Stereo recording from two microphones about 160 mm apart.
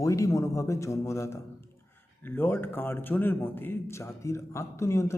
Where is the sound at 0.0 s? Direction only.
20° left (ahead or behind).